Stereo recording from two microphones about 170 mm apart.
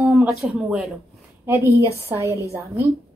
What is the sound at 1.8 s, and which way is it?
Speech, 15° left (ahead or behind).